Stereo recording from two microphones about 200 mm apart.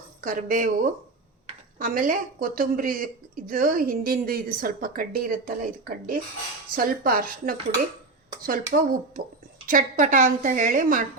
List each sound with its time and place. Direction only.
0.2 s a woman's voice: 45° right (ahead or behind)